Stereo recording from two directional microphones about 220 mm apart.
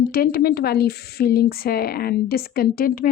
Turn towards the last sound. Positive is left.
turn(degrees=40)  # may be behind; listen again after turning